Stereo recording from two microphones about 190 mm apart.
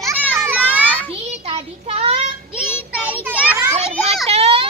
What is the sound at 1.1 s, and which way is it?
Child singing, 30° right (ahead or behind).